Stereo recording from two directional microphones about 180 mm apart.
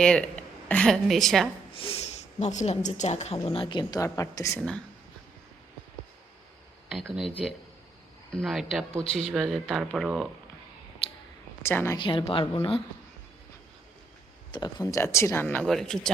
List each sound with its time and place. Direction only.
0.0 s a woman's voice: 5° left (ahead or behind)
1.7 s speech: 30° left (ahead or behind)
6.8 s speech: 5° right (ahead or behind)
11.6 s speech: 15° left (ahead or behind)
11.9 s speech: 30° left (ahead or behind)
14.5 s speech: 20° left (ahead or behind); by 16.0 s centre (ahead or behind)